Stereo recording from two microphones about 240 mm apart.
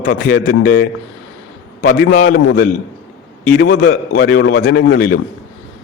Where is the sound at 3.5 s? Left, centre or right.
Left.